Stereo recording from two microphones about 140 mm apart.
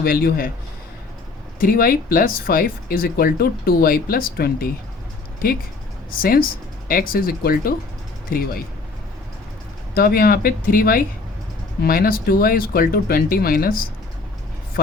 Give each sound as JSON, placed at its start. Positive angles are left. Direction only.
{"t": 0.0, "sound": "speech", "side_deg": 90}
{"t": 1.6, "sound": "speech", "side_deg": 90}
{"t": 9.9, "sound": "speech", "side_deg": 90}